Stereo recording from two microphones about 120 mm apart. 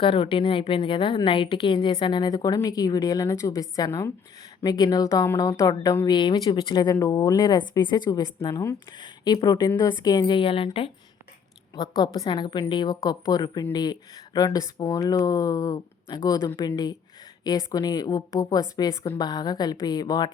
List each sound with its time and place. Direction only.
0.0 s a woman's voice: 45° left (ahead or behind); by 8.7 s 25° left (ahead or behind)
8.9 s a woman's voice: 40° left (ahead or behind)
11.7 s a woman's voice: 35° left (ahead or behind)
19.0 s a woman's voice: 45° left (ahead or behind)
19.3 s a woman's voice: 35° left (ahead or behind)